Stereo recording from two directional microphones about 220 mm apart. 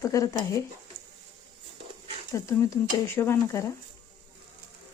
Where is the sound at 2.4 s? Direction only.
10° left (ahead or behind).